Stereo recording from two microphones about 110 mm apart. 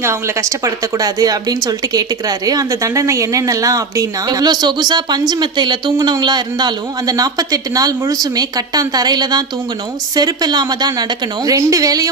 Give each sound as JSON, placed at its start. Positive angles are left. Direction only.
{"t": 0.0, "sound": "speech", "side_deg": -25}